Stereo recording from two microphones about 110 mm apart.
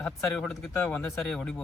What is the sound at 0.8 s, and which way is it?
Speech, 15° left (ahead or behind).